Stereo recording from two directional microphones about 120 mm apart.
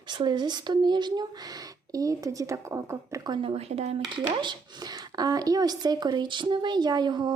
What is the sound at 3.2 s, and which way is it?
Speech, 40° right (ahead or behind).